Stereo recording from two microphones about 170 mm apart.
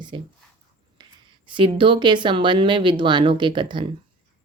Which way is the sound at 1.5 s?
30° right (ahead or behind).